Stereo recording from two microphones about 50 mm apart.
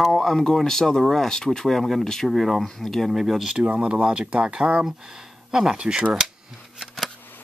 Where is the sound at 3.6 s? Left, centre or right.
Right.